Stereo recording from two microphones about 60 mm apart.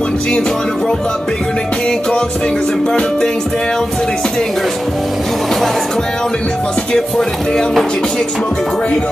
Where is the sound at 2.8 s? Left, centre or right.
Centre.